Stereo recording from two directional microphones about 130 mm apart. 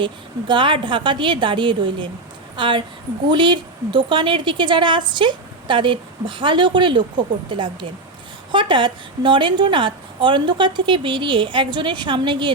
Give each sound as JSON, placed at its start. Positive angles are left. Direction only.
{"t": 0.0, "sound": "a woman's voice", "side_deg": -40}